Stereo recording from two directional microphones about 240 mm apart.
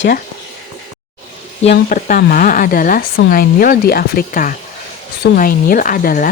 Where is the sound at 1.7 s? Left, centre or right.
Left.